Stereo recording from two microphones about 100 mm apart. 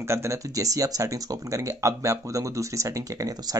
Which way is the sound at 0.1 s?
30° right (ahead or behind).